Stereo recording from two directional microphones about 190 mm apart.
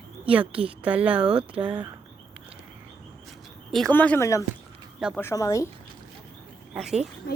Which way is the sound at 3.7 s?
Centre (ahead or behind).